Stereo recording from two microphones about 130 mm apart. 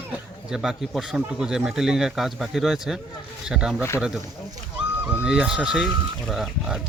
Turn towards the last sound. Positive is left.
turn(degrees=0)  # may be behind; listen again after turning